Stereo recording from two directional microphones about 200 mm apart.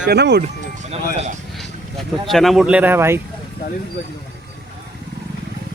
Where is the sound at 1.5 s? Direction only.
Centre (ahead or behind).